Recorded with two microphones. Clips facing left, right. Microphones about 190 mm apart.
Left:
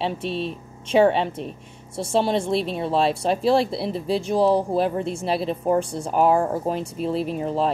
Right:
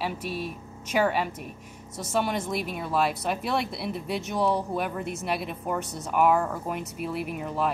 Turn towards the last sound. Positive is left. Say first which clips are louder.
# left 6 dB
turn(degrees=30)  # may be behind; listen again after turning